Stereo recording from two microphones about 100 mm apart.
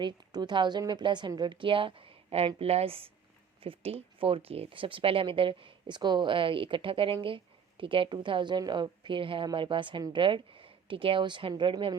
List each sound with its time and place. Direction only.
0.0 s a woman's voice: 45° right (ahead or behind); by 2.5 s 70° right (ahead or behind)
2.6 s speech: 90° right; by 11.9 s 55° right (ahead or behind)